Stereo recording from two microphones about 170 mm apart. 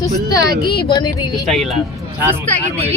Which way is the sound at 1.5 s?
Centre (ahead or behind).